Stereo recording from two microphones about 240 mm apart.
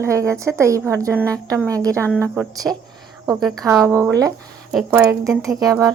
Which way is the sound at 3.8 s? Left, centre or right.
Centre.